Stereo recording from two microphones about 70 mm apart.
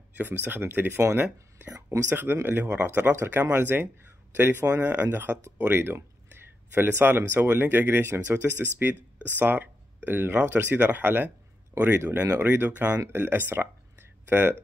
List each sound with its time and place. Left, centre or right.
0.2 s speech: right
2.4 s speech: right